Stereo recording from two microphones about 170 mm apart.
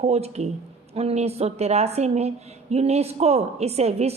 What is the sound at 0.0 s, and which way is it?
A woman's voice, 40° right (ahead or behind).